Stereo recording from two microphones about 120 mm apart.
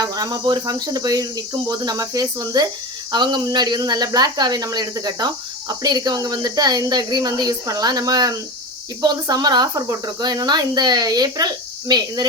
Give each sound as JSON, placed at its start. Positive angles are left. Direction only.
{"t": 0.0, "sound": "speech", "side_deg": -30}